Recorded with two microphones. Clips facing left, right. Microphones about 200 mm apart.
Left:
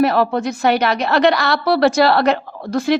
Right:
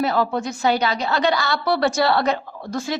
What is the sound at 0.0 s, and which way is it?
A woman's voice, 65° left (ahead or behind).